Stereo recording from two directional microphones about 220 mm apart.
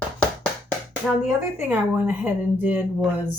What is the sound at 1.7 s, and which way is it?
A woman's voice, 5° right (ahead or behind).